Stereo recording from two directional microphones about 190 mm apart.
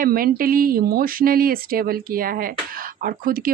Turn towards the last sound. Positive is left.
turn(degrees=-50)  # may be behind; listen again after turning